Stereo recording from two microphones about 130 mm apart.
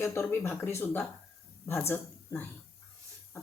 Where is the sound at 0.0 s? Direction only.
20° left (ahead or behind).